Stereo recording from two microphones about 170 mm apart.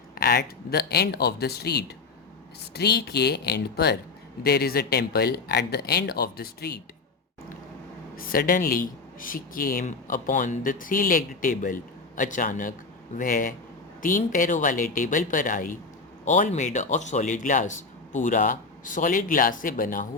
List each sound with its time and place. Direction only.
0.2 s speech: 70° left (ahead or behind)
8.1 s speech: 60° left (ahead or behind)